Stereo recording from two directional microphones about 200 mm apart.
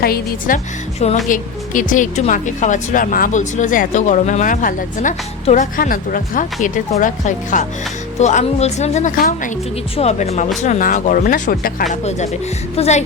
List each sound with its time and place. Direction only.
0.0 s speech: 45° left (ahead or behind)
0.9 s speech: 35° left (ahead or behind)